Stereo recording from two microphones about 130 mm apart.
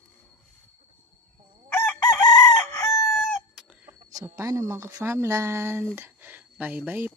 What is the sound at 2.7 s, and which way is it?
Crowing, 20° left (ahead or behind).